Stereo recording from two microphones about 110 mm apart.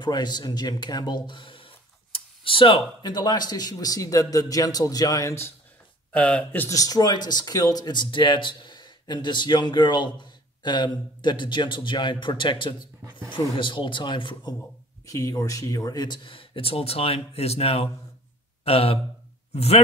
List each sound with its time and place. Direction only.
0.0 s speech: 40° left (ahead or behind)
6.1 s speech: 10° left (ahead or behind)
6.7 s speech: 35° left (ahead or behind)
15.0 s a man's voice: 30° left (ahead or behind); by 19.8 s 65° left (ahead or behind)